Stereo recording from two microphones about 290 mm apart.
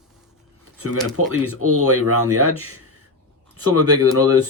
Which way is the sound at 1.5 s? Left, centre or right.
Right.